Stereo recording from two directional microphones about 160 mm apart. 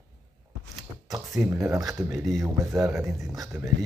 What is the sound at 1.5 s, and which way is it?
Speech, 15° right (ahead or behind).